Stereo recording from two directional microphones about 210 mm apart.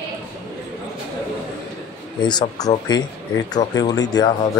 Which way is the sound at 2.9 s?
20° left (ahead or behind).